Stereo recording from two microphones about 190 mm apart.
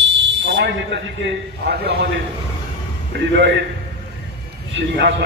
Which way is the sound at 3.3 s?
70° right (ahead or behind).